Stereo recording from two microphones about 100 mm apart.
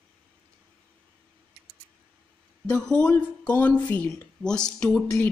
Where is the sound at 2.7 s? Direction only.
10° left (ahead or behind).